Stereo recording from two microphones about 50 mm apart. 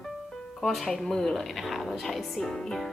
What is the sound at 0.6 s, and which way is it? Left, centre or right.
A woman's voice, centre.